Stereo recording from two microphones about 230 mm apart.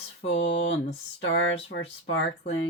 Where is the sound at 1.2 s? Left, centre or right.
Left.